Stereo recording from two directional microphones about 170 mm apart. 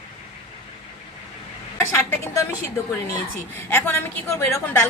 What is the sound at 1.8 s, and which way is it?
Speech, 15° left (ahead or behind).